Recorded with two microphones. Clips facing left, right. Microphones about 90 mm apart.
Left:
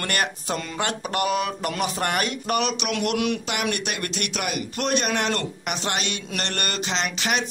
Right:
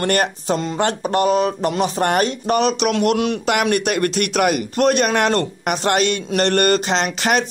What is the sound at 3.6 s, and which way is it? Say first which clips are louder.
Speech: right 9 dB; 50° right (ahead or behind).